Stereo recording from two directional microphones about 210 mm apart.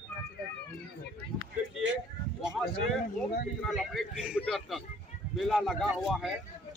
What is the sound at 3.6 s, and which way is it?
A man's voice, centre (ahead or behind).